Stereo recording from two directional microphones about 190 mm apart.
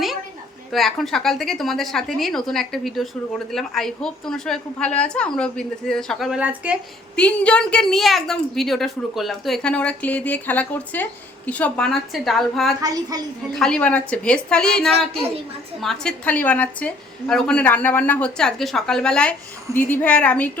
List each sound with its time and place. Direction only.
0.7 s a woman's voice: centre (ahead or behind)
7.2 s a woman's voice: 5° left (ahead or behind)
12.8 s a woman's voice: 20° right (ahead or behind)
13.6 s a woman's voice: 5° left (ahead or behind)